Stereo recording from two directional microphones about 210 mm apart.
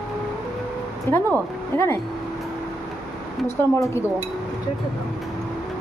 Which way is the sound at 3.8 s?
15° left (ahead or behind).